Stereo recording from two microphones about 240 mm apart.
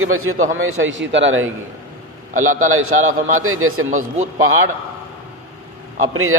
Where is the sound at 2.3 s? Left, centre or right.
Right.